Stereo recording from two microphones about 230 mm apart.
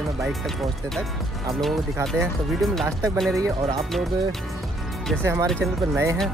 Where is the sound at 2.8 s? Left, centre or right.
Centre.